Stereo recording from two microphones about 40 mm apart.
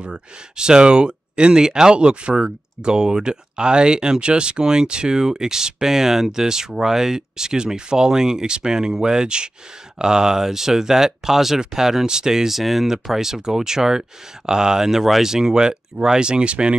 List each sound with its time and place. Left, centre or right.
0.1 s speech: centre